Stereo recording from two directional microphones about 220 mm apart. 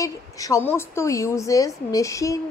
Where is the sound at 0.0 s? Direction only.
15° left (ahead or behind).